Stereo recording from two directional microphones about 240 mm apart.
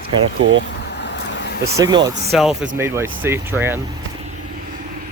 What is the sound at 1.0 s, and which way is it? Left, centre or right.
Vehicle, left.